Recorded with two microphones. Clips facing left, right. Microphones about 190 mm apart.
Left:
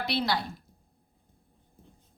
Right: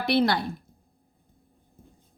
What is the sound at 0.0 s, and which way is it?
Speech, 55° right (ahead or behind).